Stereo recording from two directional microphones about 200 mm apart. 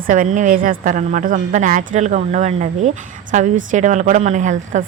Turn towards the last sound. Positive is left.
turn(degrees=-40)  # may be behind; listen again after turning